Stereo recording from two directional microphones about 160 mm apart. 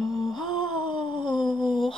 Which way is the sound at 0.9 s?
30° left (ahead or behind).